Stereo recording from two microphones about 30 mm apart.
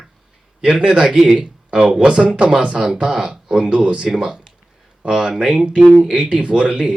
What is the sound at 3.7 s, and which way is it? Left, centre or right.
Speech, right.